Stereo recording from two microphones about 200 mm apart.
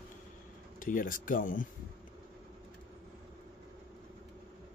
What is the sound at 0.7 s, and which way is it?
Speech, 45° left (ahead or behind).